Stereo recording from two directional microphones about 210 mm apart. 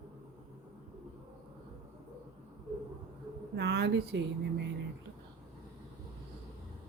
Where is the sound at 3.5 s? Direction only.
55° right (ahead or behind).